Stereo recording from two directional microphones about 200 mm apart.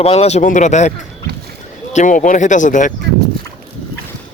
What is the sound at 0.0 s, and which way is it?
Speech, 30° left (ahead or behind).